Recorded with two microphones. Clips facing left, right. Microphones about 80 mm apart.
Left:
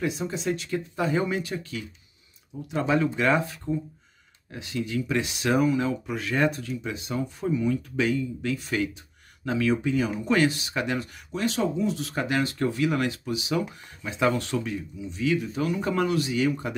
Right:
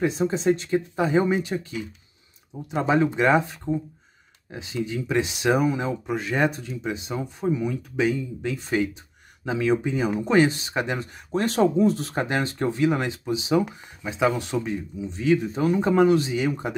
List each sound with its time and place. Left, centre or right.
0.0 s speech: right
11.3 s speech: right
14.0 s speech: centre
15.0 s speech: right